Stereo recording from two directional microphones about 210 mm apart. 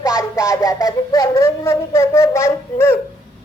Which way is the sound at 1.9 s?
15° left (ahead or behind).